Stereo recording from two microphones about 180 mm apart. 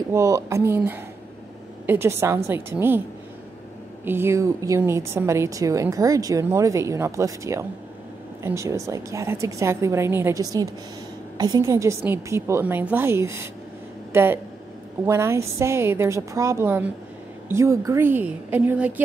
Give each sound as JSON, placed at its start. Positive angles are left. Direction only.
{"t": 0.1, "sound": "a woman's voice", "side_deg": -15}
{"t": 4.0, "sound": "a woman's voice", "side_deg": -10}